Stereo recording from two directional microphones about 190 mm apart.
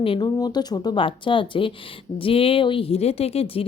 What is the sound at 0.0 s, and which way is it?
Speech, 30° left (ahead or behind).